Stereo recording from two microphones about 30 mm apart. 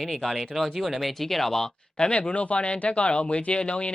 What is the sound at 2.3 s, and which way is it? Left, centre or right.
Speech, left.